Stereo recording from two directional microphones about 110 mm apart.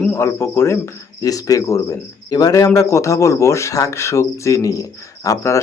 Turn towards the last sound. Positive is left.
turn(degrees=30)  # may be behind; listen again after turning